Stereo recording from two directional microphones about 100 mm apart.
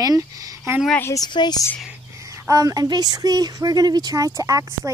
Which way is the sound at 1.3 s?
45° left (ahead or behind).